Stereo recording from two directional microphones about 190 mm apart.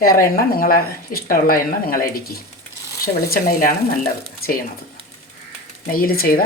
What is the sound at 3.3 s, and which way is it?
Speech, 50° left (ahead or behind).